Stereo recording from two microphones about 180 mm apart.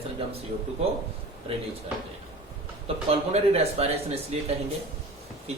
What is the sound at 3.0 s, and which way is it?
Speech, 35° right (ahead or behind).